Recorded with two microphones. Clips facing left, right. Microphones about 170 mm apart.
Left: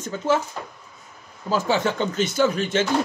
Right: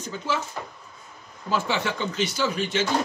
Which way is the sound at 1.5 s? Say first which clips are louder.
Left 4 dB; 45° left (ahead or behind).